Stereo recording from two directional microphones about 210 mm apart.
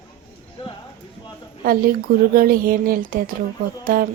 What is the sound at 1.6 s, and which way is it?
Speech, 45° right (ahead or behind).